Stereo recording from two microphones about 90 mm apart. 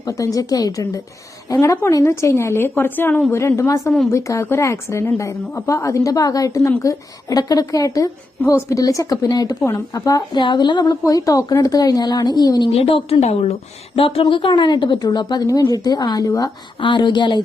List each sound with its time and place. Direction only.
0.0 s a woman's voice: 40° left (ahead or behind); by 3.2 s 20° left (ahead or behind)
3.3 s a woman's voice: 30° left (ahead or behind)
10.3 s a woman's voice: 55° left (ahead or behind)
11.0 s speech: 40° left (ahead or behind)
12.7 s a woman's voice: 90° left
14.3 s a woman's voice: 65° left (ahead or behind); by 16.5 s 40° left (ahead or behind)
16.8 s a woman's voice: 60° left (ahead or behind)